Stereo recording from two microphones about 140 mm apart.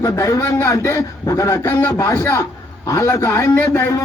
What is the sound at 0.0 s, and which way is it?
A man's voice, 20° left (ahead or behind).